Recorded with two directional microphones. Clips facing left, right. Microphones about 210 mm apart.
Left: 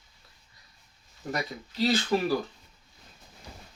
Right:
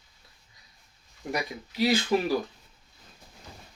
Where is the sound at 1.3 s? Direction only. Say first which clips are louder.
Right 1 dB; 10° right (ahead or behind).